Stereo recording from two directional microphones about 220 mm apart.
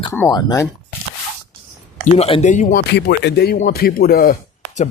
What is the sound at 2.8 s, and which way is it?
Speech, 50° left (ahead or behind).